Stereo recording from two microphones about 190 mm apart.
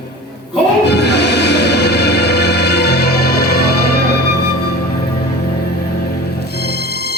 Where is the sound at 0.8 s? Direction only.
60° left (ahead or behind).